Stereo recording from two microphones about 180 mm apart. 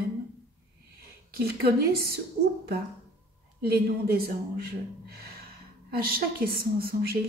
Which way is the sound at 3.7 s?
60° right (ahead or behind).